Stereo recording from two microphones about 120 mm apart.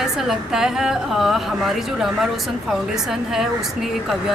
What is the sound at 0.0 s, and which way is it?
A woman's voice, 5° right (ahead or behind).